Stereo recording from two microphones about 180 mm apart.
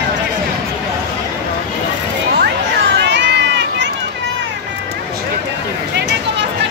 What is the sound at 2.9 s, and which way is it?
Run, 75° right (ahead or behind).